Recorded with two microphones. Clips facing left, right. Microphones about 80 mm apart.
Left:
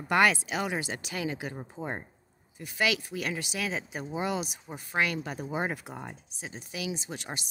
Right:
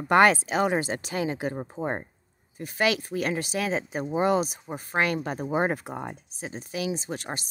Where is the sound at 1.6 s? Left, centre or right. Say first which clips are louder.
Right 6 dB; right.